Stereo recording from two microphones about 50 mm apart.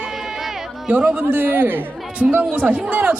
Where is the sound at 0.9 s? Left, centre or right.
Right.